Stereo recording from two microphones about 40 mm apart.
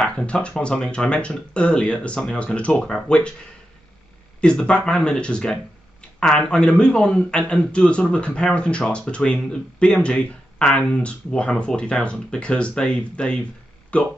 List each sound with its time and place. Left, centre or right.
0.0 s speech: left
4.4 s speech: left